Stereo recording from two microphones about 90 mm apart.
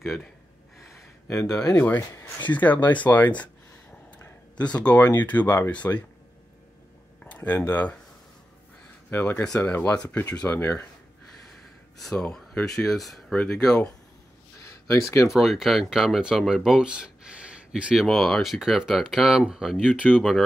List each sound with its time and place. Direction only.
1.2 s speech: 30° left (ahead or behind)
2.5 s speech: 20° left (ahead or behind)
4.6 s speech: 15° left (ahead or behind)
7.2 s a sound: 15° left (ahead or behind)
7.7 s speech: 20° left (ahead or behind)
9.1 s speech: 25° left (ahead or behind)
12.0 s speech: 5° left (ahead or behind)
14.6 s a sound: 35° left (ahead or behind)
15.2 s speech: centre (ahead or behind)
18.0 s speech: 5° left (ahead or behind)